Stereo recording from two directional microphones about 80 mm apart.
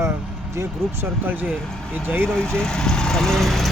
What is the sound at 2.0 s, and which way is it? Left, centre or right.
Speech, right.